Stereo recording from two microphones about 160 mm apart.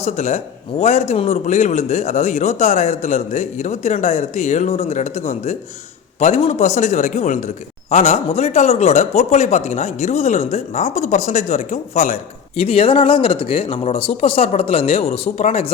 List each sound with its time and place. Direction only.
0.0 s a man's voice: 45° left (ahead or behind)